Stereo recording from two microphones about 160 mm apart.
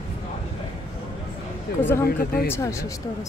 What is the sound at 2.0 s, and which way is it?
Speech, 70° left (ahead or behind).